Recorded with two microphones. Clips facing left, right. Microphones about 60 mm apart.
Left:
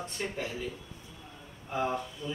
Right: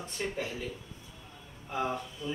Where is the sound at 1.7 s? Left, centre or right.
Centre.